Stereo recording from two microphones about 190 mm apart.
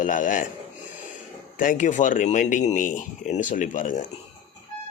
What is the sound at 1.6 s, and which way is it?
Speech, 45° left (ahead or behind).